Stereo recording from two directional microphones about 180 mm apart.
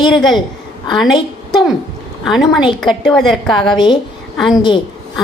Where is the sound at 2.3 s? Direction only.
Centre (ahead or behind).